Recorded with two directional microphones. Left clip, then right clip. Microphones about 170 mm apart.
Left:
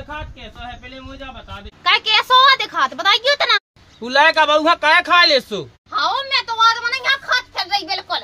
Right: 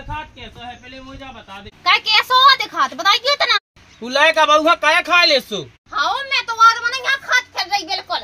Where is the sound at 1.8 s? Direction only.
40° left (ahead or behind).